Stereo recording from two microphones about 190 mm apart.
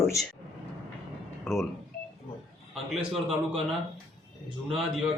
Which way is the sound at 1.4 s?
Centre (ahead or behind).